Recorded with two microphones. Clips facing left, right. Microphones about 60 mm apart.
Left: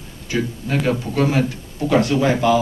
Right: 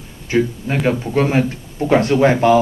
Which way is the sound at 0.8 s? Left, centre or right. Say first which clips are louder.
Right 3 dB; right.